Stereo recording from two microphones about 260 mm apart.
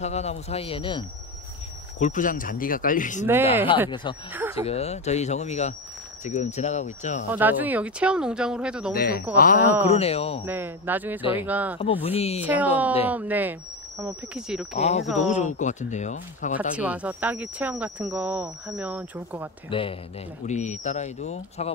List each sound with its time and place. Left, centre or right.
0.0 s speech: left
3.9 s speech: centre
4.3 s speech: centre
4.6 s speech: left
7.2 s speech: centre
8.9 s speech: left
10.4 s speech: centre
11.8 s speech: left
12.4 s speech: centre
14.8 s speech: left
16.5 s speech: centre
19.7 s speech: left